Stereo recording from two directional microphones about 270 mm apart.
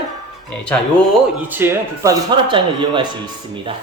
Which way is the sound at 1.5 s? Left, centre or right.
Centre.